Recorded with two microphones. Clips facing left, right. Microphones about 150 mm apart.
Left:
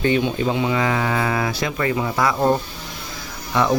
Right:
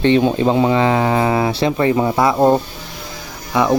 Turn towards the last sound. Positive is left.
turn(degrees=-15)  # may be behind; listen again after turning